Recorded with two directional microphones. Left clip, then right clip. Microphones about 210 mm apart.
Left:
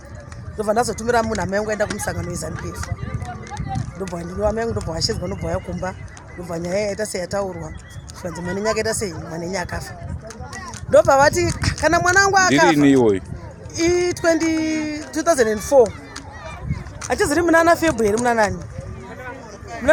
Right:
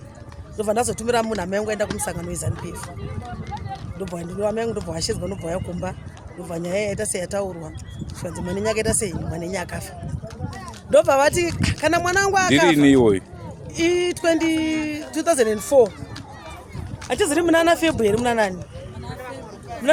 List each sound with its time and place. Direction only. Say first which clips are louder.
0.5 s speech: left 2 dB; 5° right (ahead or behind)
2.8 s speech: left 3 dB; 45° left (ahead or behind)
4.4 s speech: left 2 dB; 10° right (ahead or behind)
6.5 s speech: left 2 dB; 5° right (ahead or behind)
8.3 s speech: left 2 dB; 20° right (ahead or behind)
8.8 s speech: left 1 dB; 5° right (ahead or behind)
10.9 s speech: left 3 dB; 5° right (ahead or behind)
17.1 s speech: left 2 dB; centre (ahead or behind)